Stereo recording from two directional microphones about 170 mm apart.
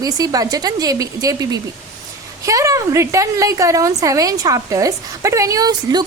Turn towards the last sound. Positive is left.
turn(degrees=-25)  # may be behind; listen again after turning